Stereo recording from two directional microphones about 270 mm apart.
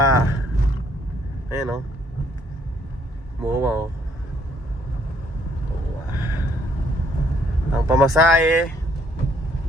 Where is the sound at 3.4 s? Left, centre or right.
Centre.